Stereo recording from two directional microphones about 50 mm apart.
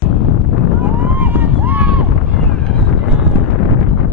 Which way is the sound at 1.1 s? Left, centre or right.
Right.